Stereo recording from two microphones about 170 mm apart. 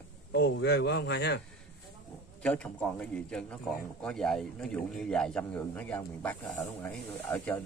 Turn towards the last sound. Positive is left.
turn(degrees=10)  # may be behind; listen again after turning